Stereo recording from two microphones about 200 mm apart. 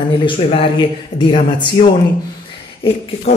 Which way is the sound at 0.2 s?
25° left (ahead or behind).